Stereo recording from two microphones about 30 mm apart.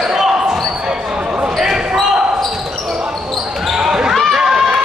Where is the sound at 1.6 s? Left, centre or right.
Centre.